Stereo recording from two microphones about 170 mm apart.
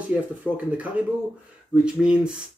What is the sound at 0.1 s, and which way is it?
Speech, 10° right (ahead or behind).